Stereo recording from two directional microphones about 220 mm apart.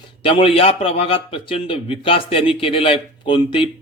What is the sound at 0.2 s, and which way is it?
A man's voice, 25° left (ahead or behind).